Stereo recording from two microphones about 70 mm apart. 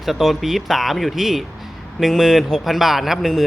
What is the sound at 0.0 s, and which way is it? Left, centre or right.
A man's voice, centre.